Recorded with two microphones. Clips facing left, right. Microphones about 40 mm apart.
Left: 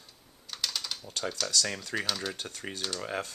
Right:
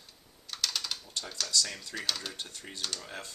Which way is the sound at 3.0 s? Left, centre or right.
Left.